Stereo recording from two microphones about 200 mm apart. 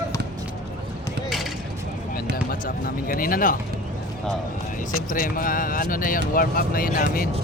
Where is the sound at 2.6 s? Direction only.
45° left (ahead or behind).